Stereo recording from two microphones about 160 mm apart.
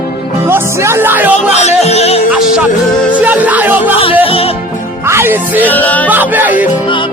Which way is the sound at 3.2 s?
10° right (ahead or behind).